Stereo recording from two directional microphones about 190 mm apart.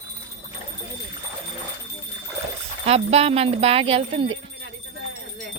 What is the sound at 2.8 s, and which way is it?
Speech, 30° right (ahead or behind).